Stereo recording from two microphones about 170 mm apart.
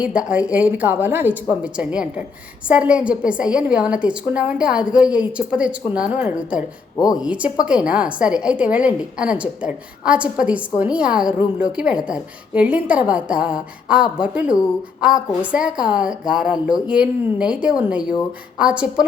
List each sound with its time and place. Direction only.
0.0 s a woman's voice: 5° right (ahead or behind)
6.9 s speech: 20° left (ahead or behind)
7.2 s a woman's voice: 5° right (ahead or behind)